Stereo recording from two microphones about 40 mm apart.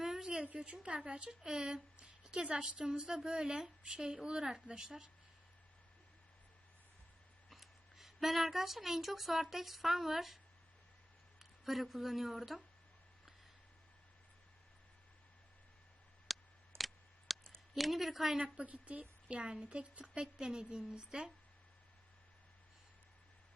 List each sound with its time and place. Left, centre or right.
0.0 s a sound: centre
0.6 s a woman's voice: right
1.4 s a woman's voice: centre
7.5 s speech: centre
11.3 s speech: centre
16.3 s a sound: centre
17.7 s speech: centre
18.3 s a woman's voice: right
18.7 s a woman's voice: right; by 21.3 s centre